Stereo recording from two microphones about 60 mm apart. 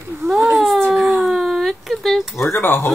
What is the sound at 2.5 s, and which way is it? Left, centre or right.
Speech, left.